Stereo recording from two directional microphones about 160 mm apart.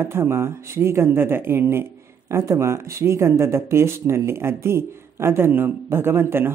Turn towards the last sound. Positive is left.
turn(degrees=-15)  # may be behind; listen again after turning